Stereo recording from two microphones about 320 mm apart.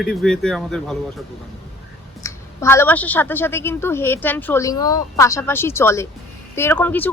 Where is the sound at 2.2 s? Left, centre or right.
Centre.